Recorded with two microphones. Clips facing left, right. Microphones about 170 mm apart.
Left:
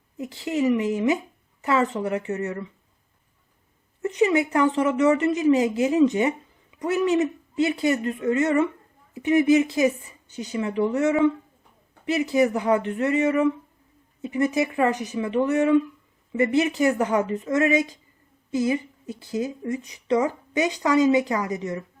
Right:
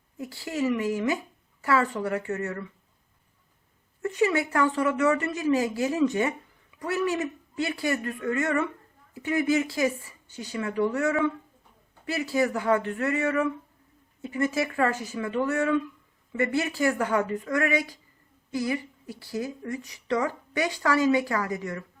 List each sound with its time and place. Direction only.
0.2 s a woman's voice: 20° left (ahead or behind)
4.0 s a woman's voice: 20° left (ahead or behind)